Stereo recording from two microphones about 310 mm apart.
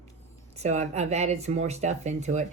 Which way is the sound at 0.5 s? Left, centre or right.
Right.